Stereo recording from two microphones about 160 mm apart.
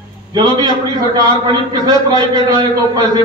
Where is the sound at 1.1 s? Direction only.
25° right (ahead or behind).